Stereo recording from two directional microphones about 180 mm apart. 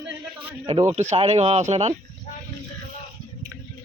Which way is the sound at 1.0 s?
35° right (ahead or behind).